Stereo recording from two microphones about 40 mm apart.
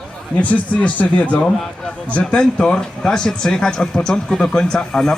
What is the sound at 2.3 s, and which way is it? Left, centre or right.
A man's voice, left.